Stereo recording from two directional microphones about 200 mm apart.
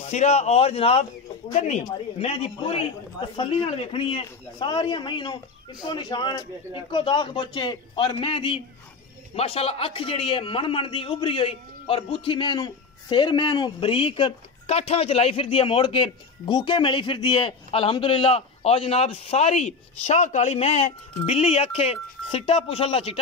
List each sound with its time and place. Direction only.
0.1 s a man's voice: 35° left (ahead or behind)